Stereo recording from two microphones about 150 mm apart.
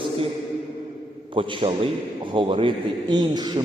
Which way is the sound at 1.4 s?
35° right (ahead or behind).